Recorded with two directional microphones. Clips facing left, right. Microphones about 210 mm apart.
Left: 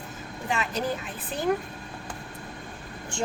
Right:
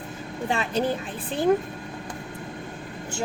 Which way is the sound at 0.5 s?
30° right (ahead or behind).